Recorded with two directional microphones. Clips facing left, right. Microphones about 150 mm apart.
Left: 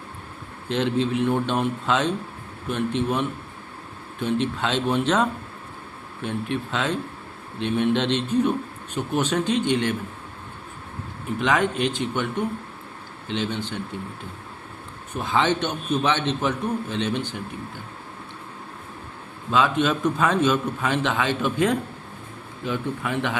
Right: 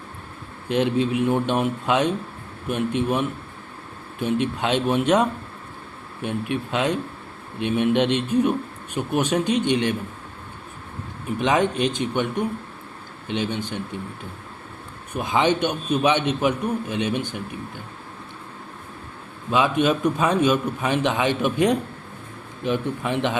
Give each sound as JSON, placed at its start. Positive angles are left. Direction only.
{"t": 0.7, "sound": "a man's voice", "side_deg": -15}
{"t": 11.3, "sound": "a man's voice", "side_deg": -20}
{"t": 15.1, "sound": "a man's voice", "side_deg": -15}
{"t": 19.5, "sound": "a man's voice", "side_deg": -15}